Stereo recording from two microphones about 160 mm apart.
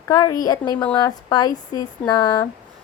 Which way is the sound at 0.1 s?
25° left (ahead or behind).